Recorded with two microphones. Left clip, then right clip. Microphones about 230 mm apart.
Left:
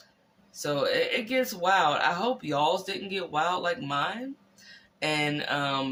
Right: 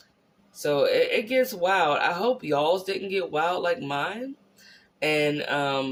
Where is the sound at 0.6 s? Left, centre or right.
Centre.